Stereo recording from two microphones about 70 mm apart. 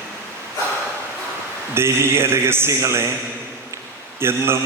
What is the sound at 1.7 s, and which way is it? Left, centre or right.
A man's voice, right.